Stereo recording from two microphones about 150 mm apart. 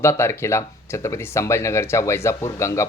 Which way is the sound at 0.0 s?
15° left (ahead or behind).